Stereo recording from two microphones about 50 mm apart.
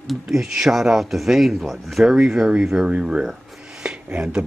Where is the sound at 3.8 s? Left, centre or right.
Centre.